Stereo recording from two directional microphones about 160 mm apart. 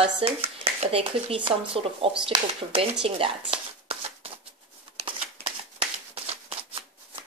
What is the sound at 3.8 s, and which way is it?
Shuffling cards, 35° right (ahead or behind).